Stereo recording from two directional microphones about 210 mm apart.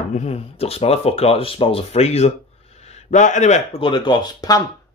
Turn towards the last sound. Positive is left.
turn(degrees=20)  # may be behind; listen again after turning